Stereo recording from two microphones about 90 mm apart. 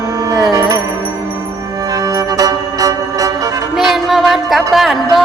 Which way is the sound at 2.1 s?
40° right (ahead or behind).